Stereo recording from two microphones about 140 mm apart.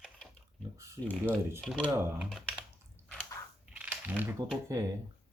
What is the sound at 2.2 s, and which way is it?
Speech, 5° right (ahead or behind).